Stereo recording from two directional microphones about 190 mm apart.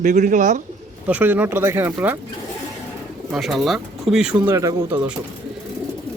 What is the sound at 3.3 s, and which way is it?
Speech, centre (ahead or behind).